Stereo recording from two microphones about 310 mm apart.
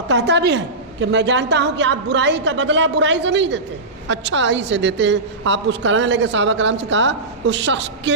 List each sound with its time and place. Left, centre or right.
0.1 s a woman's voice: right